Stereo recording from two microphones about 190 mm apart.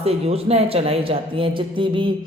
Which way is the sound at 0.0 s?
30° right (ahead or behind).